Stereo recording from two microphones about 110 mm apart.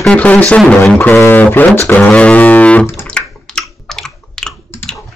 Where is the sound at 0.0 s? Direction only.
10° left (ahead or behind).